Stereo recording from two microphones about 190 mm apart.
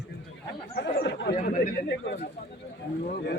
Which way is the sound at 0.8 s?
60° left (ahead or behind).